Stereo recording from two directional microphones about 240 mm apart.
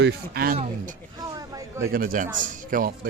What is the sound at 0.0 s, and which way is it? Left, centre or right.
Speech, right.